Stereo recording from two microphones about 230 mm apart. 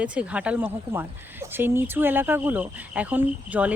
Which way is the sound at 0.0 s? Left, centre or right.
Centre.